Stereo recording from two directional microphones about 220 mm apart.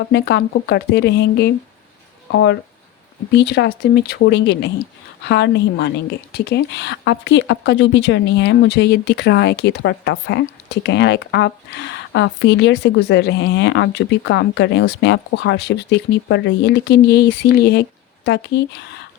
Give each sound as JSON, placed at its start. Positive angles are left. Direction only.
{"t": 0.1, "sound": "speech", "side_deg": 50}